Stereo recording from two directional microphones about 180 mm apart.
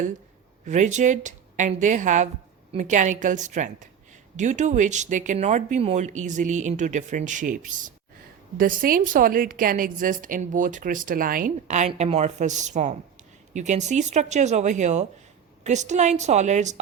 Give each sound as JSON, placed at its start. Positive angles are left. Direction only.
{"t": 0.6, "sound": "speech", "side_deg": -40}